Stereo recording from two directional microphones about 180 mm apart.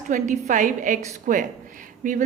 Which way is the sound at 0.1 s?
45° right (ahead or behind).